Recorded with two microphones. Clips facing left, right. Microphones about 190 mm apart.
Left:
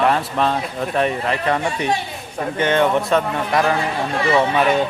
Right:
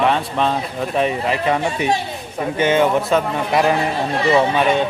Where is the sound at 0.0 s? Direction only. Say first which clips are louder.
Even; centre (ahead or behind).